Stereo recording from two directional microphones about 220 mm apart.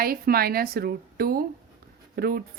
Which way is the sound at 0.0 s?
45° right (ahead or behind).